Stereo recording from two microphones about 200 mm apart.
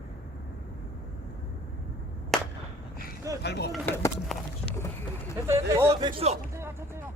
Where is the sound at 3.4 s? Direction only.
55° left (ahead or behind).